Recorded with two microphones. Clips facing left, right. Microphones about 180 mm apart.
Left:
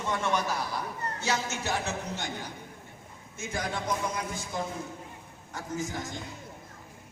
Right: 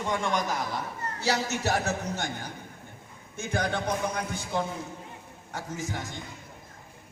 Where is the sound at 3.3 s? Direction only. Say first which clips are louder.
Right 4 dB; 60° right (ahead or behind).